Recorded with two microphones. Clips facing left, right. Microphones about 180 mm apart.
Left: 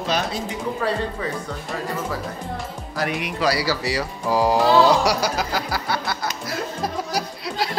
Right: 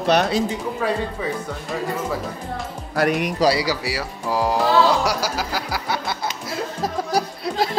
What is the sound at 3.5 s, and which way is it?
Speech, 20° right (ahead or behind).